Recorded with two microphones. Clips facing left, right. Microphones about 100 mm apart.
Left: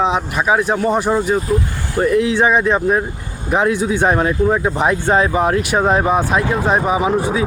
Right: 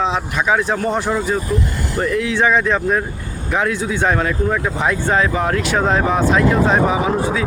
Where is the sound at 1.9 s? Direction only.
25° left (ahead or behind).